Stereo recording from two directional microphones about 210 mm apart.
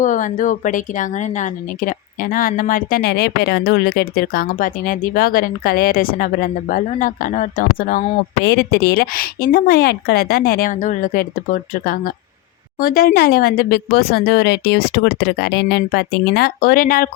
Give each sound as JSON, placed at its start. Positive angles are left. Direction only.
{"t": 0.0, "sound": "speech", "side_deg": 40}